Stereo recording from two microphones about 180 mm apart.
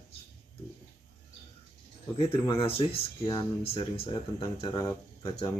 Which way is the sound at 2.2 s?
30° left (ahead or behind).